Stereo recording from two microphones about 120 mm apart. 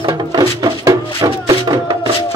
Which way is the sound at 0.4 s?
35° right (ahead or behind).